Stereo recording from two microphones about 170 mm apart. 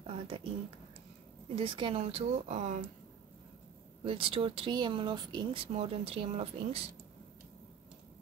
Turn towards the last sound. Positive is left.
turn(degrees=-35)  # may be behind; listen again after turning